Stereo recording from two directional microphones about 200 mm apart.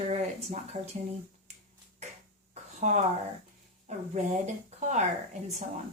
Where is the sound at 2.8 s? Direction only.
35° right (ahead or behind).